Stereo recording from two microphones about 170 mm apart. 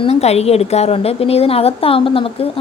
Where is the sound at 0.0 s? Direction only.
40° left (ahead or behind).